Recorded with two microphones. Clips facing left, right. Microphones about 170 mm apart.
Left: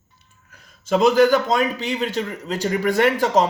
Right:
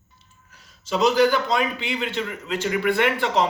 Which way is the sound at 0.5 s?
50° left (ahead or behind).